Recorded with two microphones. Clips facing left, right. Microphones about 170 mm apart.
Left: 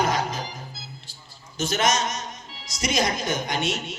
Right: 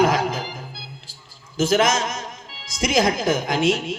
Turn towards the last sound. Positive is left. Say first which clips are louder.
# right 7 dB
turn(degrees=-90)